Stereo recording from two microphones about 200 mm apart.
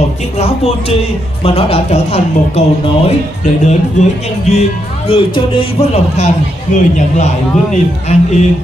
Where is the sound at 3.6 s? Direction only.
35° left (ahead or behind).